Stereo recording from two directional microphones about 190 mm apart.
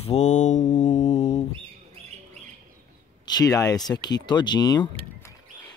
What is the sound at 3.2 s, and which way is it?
Speech, 20° left (ahead or behind).